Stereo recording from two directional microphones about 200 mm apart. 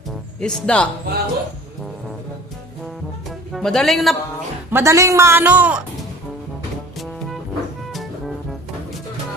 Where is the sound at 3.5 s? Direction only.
Centre (ahead or behind).